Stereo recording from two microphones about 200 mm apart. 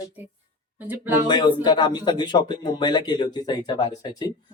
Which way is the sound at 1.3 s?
20° left (ahead or behind).